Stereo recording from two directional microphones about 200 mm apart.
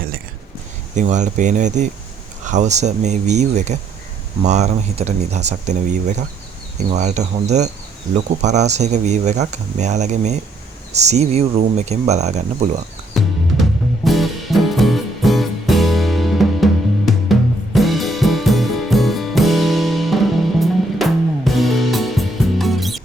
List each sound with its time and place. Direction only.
0.9 s speech: 35° right (ahead or behind)
13.1 s music: centre (ahead or behind)
17.7 s music: centre (ahead or behind)